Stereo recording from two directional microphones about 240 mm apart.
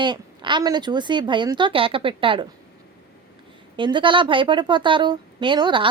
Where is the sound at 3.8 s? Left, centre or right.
Centre.